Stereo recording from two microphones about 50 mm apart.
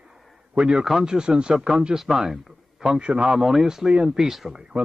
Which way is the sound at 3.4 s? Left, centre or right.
Centre.